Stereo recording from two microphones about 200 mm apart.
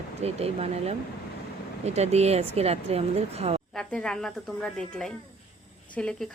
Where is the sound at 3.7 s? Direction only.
5° left (ahead or behind).